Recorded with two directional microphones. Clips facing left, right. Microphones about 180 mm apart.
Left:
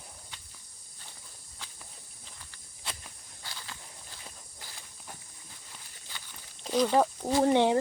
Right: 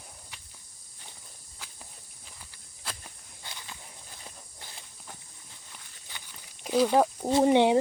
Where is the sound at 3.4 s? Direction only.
20° right (ahead or behind).